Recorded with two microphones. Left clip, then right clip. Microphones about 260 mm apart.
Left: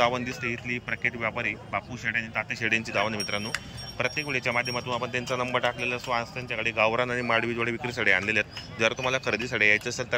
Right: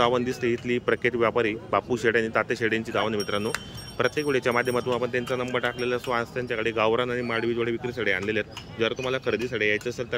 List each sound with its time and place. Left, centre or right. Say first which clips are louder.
0.0 s speech: right 2 dB; centre